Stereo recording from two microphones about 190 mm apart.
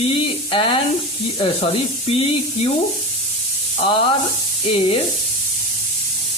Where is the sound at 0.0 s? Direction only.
30° left (ahead or behind).